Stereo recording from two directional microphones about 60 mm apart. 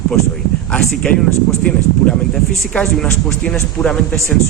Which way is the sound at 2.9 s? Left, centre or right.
Centre.